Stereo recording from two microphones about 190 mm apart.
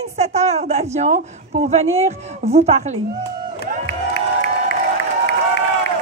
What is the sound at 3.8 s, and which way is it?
Crowd, 60° left (ahead or behind).